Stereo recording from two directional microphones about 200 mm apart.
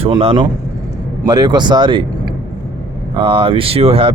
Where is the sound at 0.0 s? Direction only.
25° right (ahead or behind).